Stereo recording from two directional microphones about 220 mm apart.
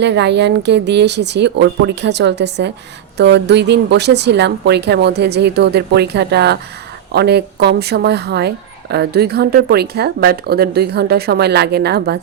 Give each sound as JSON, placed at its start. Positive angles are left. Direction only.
{"t": 0.0, "sound": "speech", "side_deg": -50}